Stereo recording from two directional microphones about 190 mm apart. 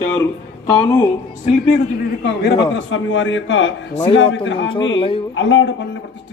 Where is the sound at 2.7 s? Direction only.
80° left.